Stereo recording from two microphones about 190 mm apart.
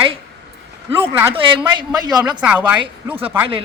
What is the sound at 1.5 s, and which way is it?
Speech, 25° right (ahead or behind).